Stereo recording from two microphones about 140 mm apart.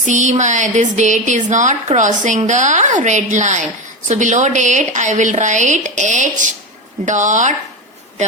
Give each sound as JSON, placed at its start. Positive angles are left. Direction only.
{"t": 0.0, "sound": "speech", "side_deg": -60}